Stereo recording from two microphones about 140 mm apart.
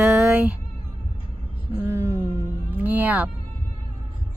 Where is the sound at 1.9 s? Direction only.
20° right (ahead or behind).